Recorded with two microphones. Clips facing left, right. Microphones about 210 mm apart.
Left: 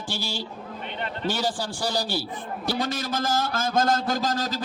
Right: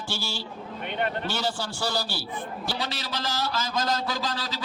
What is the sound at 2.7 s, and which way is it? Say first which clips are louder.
A man's voice: left 7 dB; 50° left (ahead or behind).